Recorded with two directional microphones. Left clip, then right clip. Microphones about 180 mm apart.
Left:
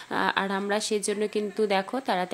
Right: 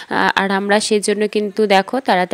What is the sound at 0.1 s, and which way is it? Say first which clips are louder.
Speech: right 10 dB; 45° right (ahead or behind).